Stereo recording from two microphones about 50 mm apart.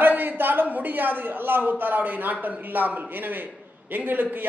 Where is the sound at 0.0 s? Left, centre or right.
Right.